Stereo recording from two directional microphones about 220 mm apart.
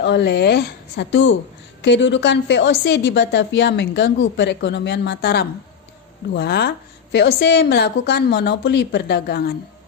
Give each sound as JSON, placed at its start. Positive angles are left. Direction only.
{"t": 0.0, "sound": "a woman's voice", "side_deg": 50}